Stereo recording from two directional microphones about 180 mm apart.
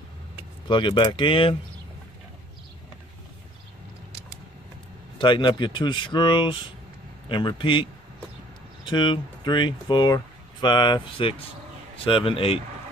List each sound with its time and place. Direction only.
0.7 s speech: 25° left (ahead or behind)
5.2 s speech: 25° left (ahead or behind)